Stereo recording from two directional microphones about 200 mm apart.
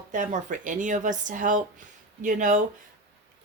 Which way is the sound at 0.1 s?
40° right (ahead or behind).